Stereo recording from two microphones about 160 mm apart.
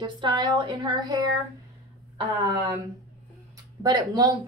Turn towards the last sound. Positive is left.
turn(degrees=-25)  # may be behind; listen again after turning